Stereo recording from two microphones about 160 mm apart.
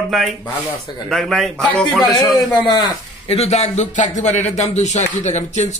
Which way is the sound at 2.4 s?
25° left (ahead or behind).